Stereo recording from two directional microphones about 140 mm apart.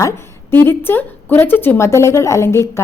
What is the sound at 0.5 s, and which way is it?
A woman's voice, 15° left (ahead or behind).